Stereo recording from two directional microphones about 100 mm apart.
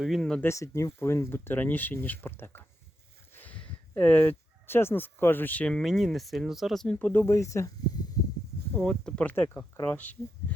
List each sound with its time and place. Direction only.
0.2 s speech: 5° left (ahead or behind)
0.4 s speech: 30° left (ahead or behind); by 5.8 s 10° left (ahead or behind)
5.8 s speech: centre (ahead or behind)
6.9 s speech: 20° left (ahead or behind)
7.3 s speech: 30° left (ahead or behind)
8.7 s speech: 10° left (ahead or behind)
9.3 s speech: 20° left (ahead or behind)